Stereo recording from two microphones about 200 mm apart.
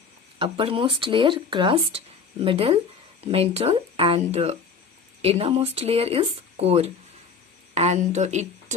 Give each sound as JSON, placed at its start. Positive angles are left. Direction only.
{"t": 0.3, "sound": "speech", "side_deg": -25}